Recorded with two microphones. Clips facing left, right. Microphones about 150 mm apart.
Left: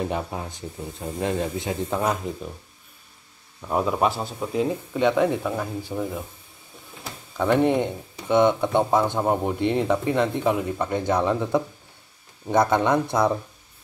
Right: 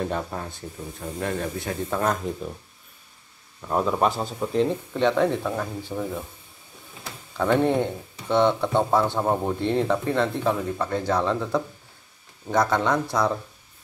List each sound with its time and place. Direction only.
0.0 s speech: 10° left (ahead or behind)
3.6 s speech: 5° left (ahead or behind)
7.3 s speech: 5° left (ahead or behind)